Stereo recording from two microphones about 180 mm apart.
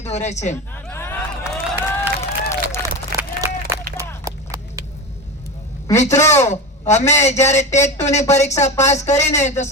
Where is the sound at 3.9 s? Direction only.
20° right (ahead or behind).